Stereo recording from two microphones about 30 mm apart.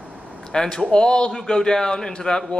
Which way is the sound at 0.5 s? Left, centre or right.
Left.